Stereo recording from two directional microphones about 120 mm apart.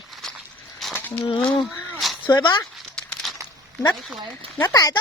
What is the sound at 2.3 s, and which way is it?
Speech, 40° left (ahead or behind).